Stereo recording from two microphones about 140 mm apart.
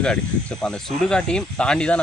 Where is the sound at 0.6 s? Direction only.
5° left (ahead or behind).